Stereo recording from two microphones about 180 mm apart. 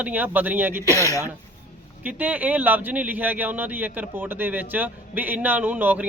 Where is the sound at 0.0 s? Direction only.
10° right (ahead or behind).